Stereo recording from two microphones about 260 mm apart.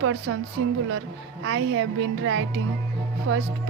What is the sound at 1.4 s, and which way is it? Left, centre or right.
A woman's voice, right.